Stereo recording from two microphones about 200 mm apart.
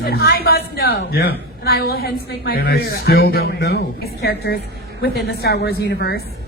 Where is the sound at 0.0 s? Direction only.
50° left (ahead or behind).